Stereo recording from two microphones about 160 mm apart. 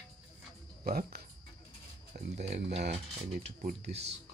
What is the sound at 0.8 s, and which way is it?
Speech, 65° right (ahead or behind).